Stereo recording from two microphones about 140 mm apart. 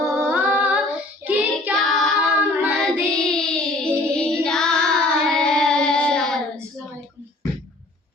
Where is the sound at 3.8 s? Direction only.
5° left (ahead or behind).